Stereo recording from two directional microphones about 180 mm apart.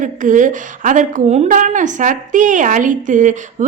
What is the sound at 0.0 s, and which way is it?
A woman's voice, 45° right (ahead or behind).